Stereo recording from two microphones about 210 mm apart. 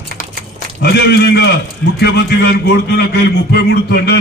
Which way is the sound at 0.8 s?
50° left (ahead or behind).